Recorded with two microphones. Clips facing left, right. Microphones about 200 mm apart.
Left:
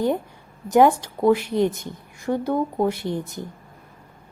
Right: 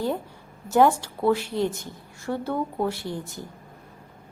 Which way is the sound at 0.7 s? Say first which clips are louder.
Left 3 dB; 15° left (ahead or behind).